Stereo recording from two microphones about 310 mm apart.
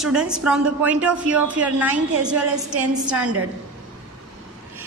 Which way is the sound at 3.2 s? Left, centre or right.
Right.